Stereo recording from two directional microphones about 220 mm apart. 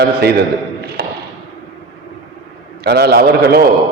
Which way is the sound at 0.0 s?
45° right (ahead or behind).